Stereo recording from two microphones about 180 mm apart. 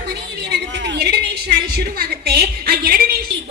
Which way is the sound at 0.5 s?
80° right.